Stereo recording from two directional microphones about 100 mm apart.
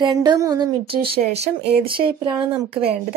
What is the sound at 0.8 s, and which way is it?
Speech, 70° right (ahead or behind).